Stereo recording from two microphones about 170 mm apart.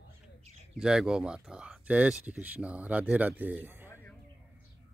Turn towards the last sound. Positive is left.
turn(degrees=-10)  # may be behind; listen again after turning